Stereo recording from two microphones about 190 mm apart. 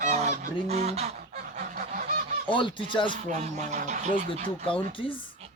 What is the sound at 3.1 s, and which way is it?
Speech, 40° right (ahead or behind).